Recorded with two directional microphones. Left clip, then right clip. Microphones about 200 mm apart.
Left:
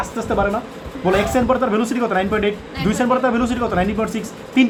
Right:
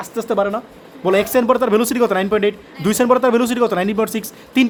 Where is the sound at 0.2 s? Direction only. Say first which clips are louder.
Right 2 dB; 50° right (ahead or behind).